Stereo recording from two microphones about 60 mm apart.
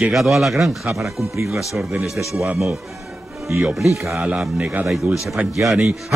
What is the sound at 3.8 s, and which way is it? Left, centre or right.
Speech, right.